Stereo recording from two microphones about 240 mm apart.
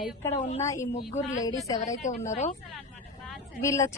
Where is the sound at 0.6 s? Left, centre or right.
Centre.